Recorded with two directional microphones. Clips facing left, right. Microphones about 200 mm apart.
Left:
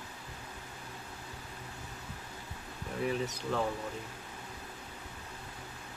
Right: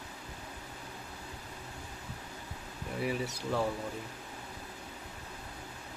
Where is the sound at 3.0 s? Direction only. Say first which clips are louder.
Left 1 dB; 10° right (ahead or behind).